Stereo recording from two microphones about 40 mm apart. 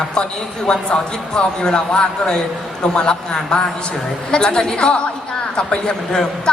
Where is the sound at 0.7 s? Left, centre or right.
Left.